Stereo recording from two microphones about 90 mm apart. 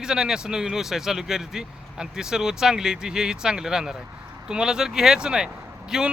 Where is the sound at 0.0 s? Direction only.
10° right (ahead or behind).